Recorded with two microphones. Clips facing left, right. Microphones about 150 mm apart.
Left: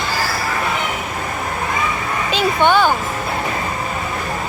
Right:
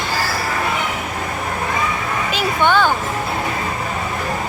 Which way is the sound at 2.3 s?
20° left (ahead or behind).